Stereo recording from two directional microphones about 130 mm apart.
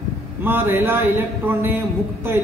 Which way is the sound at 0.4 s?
15° right (ahead or behind).